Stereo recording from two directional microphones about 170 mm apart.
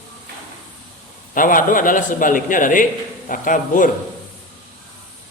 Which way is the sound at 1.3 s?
55° left (ahead or behind).